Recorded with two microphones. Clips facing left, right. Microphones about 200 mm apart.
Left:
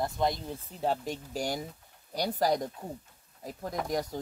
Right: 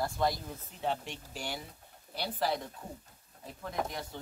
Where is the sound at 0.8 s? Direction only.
40° left (ahead or behind).